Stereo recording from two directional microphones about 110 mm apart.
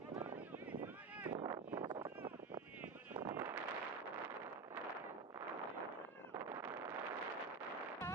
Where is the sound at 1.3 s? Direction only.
40° right (ahead or behind).